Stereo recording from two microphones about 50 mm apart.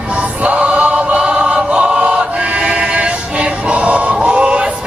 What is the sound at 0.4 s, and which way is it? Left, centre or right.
Choir, right.